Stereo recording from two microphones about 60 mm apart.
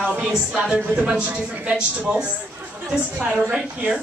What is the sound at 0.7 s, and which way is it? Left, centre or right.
Speech, right.